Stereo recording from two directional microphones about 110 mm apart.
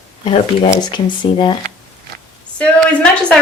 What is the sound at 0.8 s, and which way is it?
Speech, 45° left (ahead or behind).